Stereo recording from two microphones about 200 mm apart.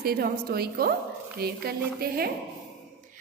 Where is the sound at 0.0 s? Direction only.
50° right (ahead or behind).